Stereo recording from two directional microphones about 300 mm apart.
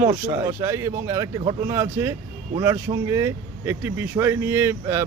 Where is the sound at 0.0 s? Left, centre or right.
Centre.